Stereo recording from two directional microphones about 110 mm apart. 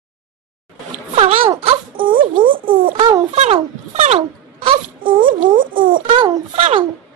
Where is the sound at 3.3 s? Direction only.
85° right; by 4.8 s 65° right (ahead or behind).